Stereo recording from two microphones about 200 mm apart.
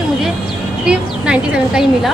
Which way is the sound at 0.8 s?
5° right (ahead or behind).